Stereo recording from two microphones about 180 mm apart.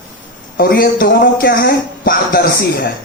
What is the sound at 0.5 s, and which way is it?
Speech, 55° left (ahead or behind).